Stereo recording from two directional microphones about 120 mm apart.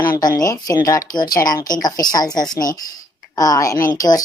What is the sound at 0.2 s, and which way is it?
A woman's voice, 30° left (ahead or behind).